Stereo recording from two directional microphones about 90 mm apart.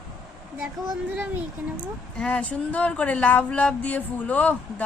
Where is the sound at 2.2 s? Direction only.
15° left (ahead or behind).